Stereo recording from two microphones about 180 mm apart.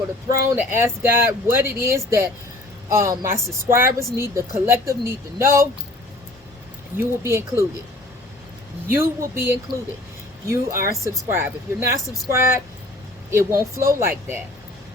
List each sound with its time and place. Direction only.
0.4 s speech: 15° right (ahead or behind)
6.9 s speech: 15° right (ahead or behind)
8.9 s speech: 15° right (ahead or behind)
12.0 s speech: centre (ahead or behind)
13.3 s speech: 15° right (ahead or behind)